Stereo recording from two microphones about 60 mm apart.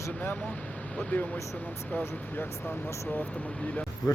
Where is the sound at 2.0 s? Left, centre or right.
Left.